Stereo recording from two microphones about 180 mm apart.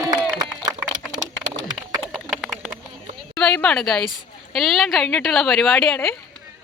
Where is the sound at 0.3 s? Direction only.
20° right (ahead or behind).